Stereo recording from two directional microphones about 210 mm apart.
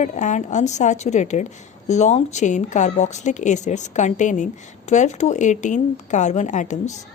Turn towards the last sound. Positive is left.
turn(degrees=35)  # may be behind; listen again after turning